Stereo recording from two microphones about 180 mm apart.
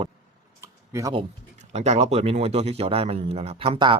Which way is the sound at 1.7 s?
40° right (ahead or behind).